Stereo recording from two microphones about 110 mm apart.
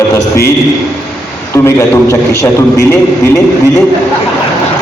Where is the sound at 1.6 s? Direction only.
25° left (ahead or behind).